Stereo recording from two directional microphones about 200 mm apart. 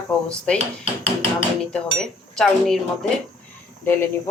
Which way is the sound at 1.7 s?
5° left (ahead or behind).